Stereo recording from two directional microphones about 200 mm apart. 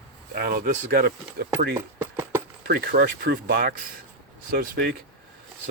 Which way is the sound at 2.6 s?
55° right (ahead or behind).